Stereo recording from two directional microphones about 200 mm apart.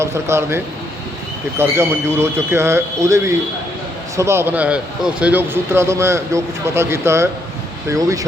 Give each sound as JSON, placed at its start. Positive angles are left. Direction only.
{"t": 0.0, "sound": "a man's voice", "side_deg": -15}